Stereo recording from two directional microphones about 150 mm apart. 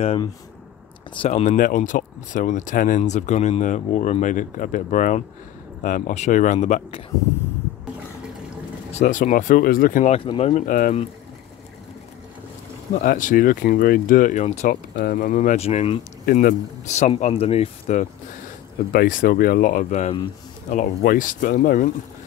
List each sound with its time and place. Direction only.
1.1 s speech: 35° left (ahead or behind)
1.4 s speech: 55° left (ahead or behind)
3.0 s speech: 50° left (ahead or behind)
8.9 s speech: 60° left (ahead or behind)
10.1 s speech: 40° left (ahead or behind)
10.5 s speech: 65° left (ahead or behind)
12.9 s speech: 65° left (ahead or behind); by 16.0 s 40° left (ahead or behind)
16.3 s speech: 65° left (ahead or behind); by 18.0 s 45° left (ahead or behind)
18.9 s speech: 70° left (ahead or behind); by 20.2 s 45° left (ahead or behind)
20.7 s speech: 65° left (ahead or behind)